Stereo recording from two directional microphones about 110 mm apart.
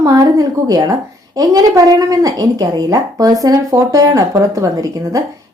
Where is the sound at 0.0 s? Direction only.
35° right (ahead or behind).